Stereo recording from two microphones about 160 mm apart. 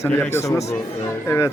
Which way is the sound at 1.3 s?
15° left (ahead or behind).